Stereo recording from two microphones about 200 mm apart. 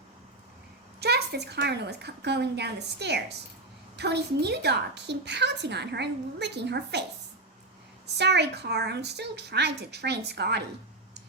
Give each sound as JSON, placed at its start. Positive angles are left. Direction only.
{"t": 0.9, "sound": "a woman's voice", "side_deg": -55}
{"t": 8.2, "sound": "a woman's voice", "side_deg": -55}